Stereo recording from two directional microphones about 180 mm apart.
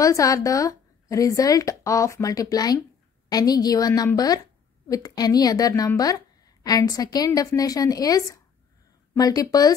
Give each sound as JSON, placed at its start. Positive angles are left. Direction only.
{"t": 0.0, "sound": "a woman's voice", "side_deg": 20}